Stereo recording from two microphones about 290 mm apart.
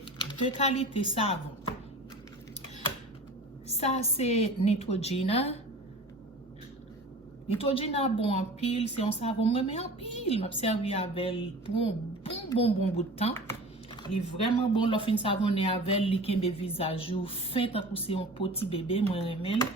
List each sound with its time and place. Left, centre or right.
0.5 s a woman's voice: centre
3.7 s a woman's voice: left
7.6 s a woman's voice: centre
14.7 s a woman's voice: centre